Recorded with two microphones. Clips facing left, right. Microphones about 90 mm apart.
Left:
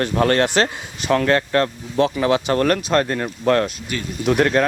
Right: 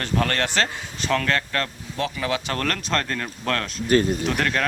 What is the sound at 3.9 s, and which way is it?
Speech, 45° right (ahead or behind).